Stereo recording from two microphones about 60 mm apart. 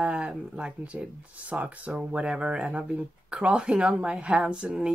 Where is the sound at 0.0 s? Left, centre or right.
Centre.